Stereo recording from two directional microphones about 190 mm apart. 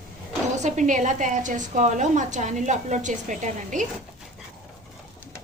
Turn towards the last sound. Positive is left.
turn(degrees=-40)  # may be behind; listen again after turning